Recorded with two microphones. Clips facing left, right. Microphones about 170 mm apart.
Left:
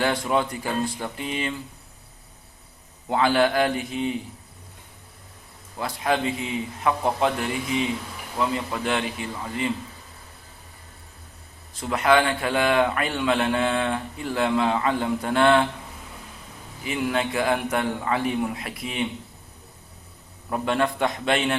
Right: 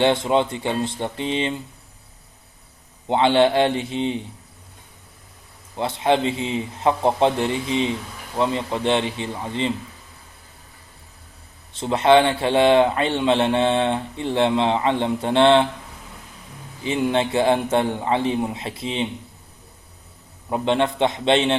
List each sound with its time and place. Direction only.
0.0 s speech: 25° right (ahead or behind)
3.1 s speech: 25° right (ahead or behind)
5.7 s speech: 25° right (ahead or behind)
11.7 s speech: 25° right (ahead or behind)
16.8 s speech: 25° right (ahead or behind)
20.5 s speech: 25° right (ahead or behind)